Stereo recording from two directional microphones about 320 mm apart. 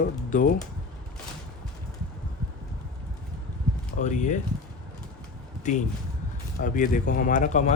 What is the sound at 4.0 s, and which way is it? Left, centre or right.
Speech, left.